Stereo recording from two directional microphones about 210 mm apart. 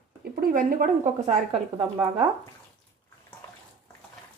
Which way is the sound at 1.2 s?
30° right (ahead or behind).